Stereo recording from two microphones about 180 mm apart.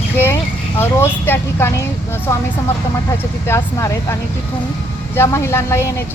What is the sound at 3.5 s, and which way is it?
Speech, 15° left (ahead or behind).